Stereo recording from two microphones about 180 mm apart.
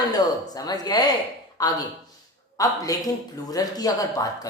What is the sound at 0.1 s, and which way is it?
A man's voice, 20° left (ahead or behind).